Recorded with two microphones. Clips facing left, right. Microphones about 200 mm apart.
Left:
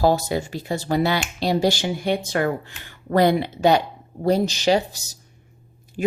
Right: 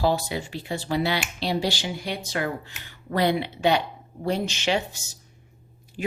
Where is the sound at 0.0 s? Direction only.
45° left (ahead or behind).